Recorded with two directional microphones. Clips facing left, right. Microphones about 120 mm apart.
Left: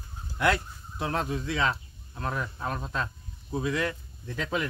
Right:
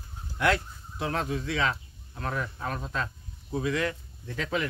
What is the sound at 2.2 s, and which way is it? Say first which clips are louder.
Speech: even; 20° left (ahead or behind).